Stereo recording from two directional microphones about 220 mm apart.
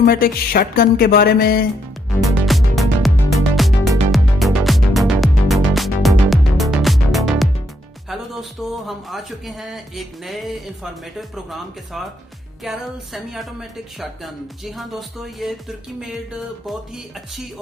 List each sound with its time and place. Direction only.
0.0 s music: 40° left (ahead or behind)
2.5 s music: centre (ahead or behind)
8.1 s a woman's voice: centre (ahead or behind)
16.6 s a woman's voice: centre (ahead or behind)